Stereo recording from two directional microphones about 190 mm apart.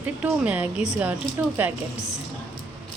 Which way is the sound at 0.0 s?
10° right (ahead or behind).